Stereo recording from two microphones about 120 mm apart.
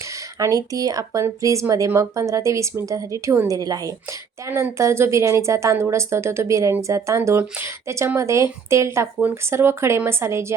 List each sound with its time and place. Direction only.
0.3 s a woman's voice: 30° right (ahead or behind)